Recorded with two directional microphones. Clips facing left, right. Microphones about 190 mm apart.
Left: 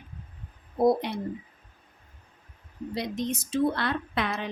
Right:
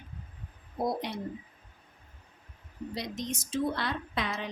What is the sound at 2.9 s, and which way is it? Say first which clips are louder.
Speech: left 6 dB; 60° left (ahead or behind).